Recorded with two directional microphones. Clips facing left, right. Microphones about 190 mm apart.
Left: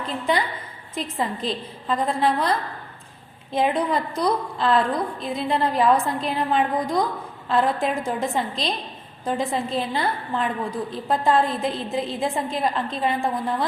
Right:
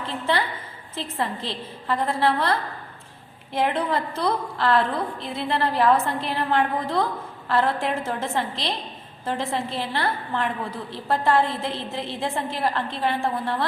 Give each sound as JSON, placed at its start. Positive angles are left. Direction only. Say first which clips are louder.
{"t": 0.9, "sound": "a woman's voice", "louder": "left 2 dB", "side_deg": 15}